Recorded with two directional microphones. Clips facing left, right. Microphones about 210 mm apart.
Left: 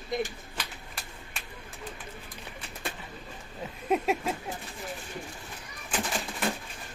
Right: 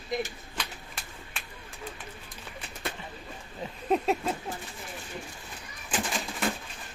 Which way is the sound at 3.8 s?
5° left (ahead or behind).